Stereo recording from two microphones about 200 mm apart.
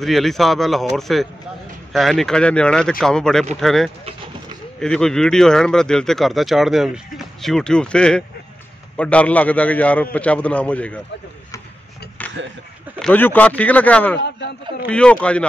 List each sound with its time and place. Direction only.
0.0 s speech: centre (ahead or behind)
12.4 s speech: 70° right (ahead or behind)
13.0 s speech: 10° left (ahead or behind)
14.2 s a man's voice: 60° left (ahead or behind)
14.9 s speech: 5° left (ahead or behind)